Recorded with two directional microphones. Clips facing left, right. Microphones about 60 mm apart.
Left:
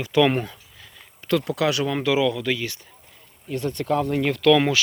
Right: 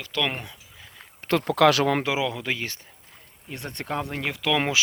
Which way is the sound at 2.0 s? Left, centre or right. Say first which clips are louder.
Left 5 dB; right.